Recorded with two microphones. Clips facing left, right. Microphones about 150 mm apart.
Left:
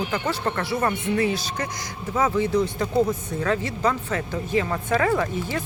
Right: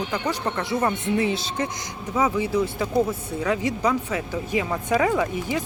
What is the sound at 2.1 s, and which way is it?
Speech, 10° right (ahead or behind).